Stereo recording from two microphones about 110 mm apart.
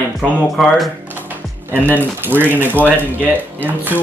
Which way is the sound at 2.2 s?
20° right (ahead or behind).